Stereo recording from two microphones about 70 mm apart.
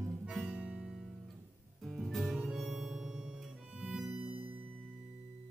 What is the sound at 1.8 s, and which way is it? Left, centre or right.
Harmonica, centre.